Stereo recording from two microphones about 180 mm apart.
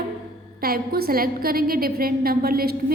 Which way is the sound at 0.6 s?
55° right (ahead or behind).